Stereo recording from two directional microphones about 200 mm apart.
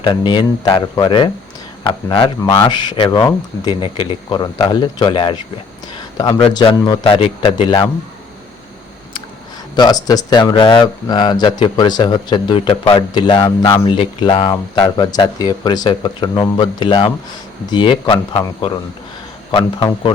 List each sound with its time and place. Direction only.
0.0 s speech: 25° left (ahead or behind)
9.7 s speech: 20° left (ahead or behind)